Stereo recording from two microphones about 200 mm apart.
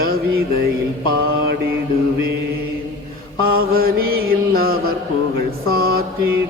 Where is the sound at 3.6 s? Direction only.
50° right (ahead or behind).